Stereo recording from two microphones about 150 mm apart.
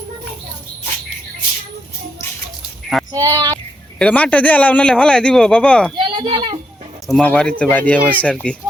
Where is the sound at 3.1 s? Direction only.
25° right (ahead or behind).